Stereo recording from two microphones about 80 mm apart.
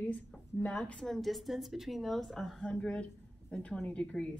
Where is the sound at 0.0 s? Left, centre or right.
Centre.